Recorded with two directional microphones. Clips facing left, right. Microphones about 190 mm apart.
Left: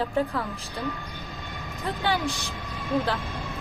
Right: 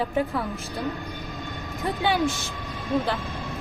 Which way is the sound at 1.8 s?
Centre (ahead or behind).